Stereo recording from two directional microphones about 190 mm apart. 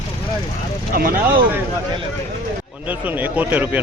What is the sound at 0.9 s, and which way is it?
Speech, 50° right (ahead or behind).